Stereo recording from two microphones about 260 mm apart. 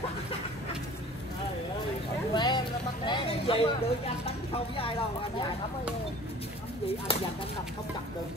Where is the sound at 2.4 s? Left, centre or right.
Centre.